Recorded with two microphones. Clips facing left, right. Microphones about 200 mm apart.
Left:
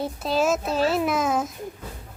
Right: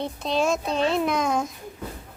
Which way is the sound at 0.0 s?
5° left (ahead or behind).